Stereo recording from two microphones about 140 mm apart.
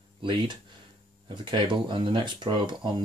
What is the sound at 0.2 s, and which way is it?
Speech, 35° right (ahead or behind).